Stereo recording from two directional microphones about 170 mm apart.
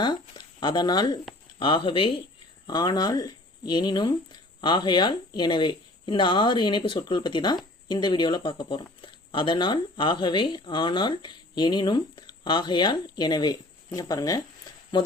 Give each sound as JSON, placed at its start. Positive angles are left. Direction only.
{"t": 0.0, "sound": "speech", "side_deg": 25}